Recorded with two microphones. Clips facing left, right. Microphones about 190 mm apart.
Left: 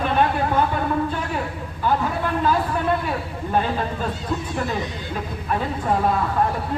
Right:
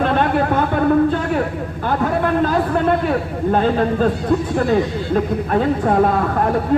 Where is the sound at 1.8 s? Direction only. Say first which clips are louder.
Right 3 dB; 55° right (ahead or behind).